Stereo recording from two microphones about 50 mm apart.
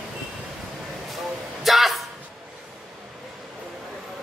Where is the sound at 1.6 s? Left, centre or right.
Centre.